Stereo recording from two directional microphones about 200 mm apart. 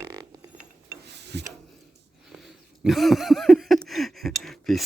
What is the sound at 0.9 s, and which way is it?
Pulleys, 60° right (ahead or behind).